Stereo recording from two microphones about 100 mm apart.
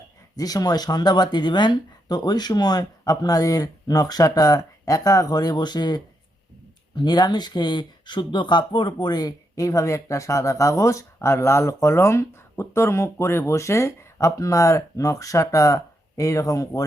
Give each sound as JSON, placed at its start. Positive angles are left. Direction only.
{"t": 0.3, "sound": "speech", "side_deg": 40}